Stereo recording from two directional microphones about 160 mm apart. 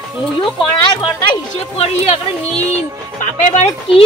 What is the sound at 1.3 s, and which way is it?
Speech, 35° left (ahead or behind).